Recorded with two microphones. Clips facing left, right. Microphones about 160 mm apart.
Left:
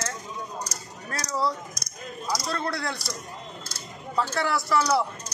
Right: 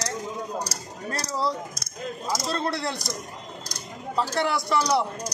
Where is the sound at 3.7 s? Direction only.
20° right (ahead or behind).